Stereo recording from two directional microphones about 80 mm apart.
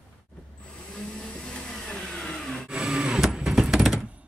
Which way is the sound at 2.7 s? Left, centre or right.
Centre.